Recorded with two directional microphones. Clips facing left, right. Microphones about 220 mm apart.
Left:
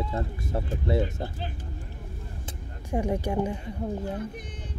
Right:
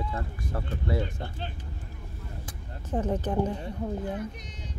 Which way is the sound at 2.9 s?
10° left (ahead or behind).